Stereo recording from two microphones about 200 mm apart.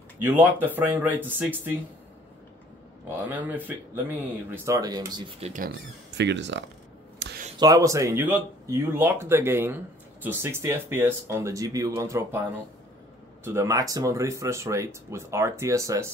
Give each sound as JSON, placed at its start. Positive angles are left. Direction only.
{"t": 0.2, "sound": "speech", "side_deg": -10}
{"t": 3.3, "sound": "speech", "side_deg": -10}
{"t": 5.4, "sound": "speech", "side_deg": -40}
{"t": 5.7, "sound": "speech", "side_deg": -60}
{"t": 7.2, "sound": "a sound", "side_deg": -60}
{"t": 7.5, "sound": "speech", "side_deg": -20}
{"t": 13.4, "sound": "speech", "side_deg": -15}